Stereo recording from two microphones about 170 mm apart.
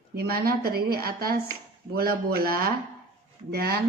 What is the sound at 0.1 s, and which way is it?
A woman's voice, 65° right (ahead or behind).